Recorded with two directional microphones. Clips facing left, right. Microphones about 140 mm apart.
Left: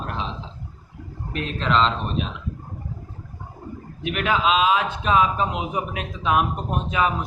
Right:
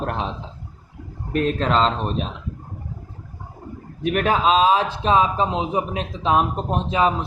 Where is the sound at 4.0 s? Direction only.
40° right (ahead or behind).